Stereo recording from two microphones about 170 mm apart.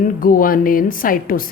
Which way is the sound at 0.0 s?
55° left (ahead or behind).